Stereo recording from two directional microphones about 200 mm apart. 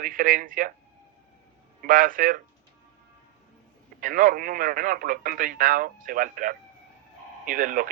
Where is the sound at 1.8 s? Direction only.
45° right (ahead or behind).